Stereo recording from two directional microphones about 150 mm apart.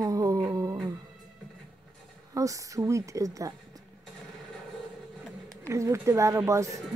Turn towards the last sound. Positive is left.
turn(degrees=-20)  # may be behind; listen again after turning